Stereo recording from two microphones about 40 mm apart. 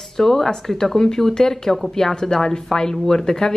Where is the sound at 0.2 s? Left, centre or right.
Centre.